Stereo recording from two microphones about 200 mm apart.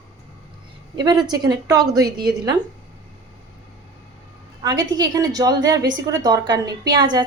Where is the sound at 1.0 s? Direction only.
20° right (ahead or behind).